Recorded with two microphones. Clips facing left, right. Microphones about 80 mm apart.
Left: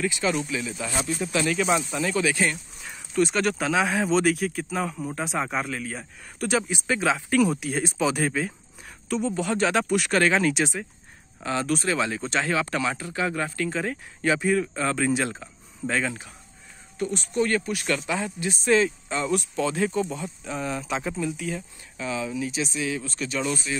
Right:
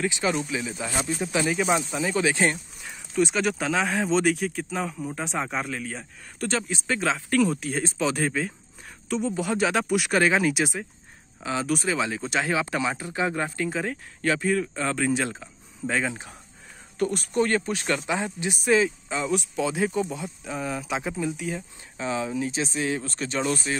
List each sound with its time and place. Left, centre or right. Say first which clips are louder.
0.0 s speech: even; right
2.8 s speech: left 1 dB; centre; by 13.7 s right
13.7 s speech: even; centre
14.2 s speech: left 1 dB; centre
17.0 s speech: right 1 dB; right
17.5 s speech: even; right
21.9 s speech: right 2 dB; right